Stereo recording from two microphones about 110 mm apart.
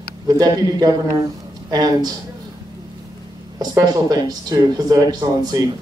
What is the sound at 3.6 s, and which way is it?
Speech, 35° right (ahead or behind).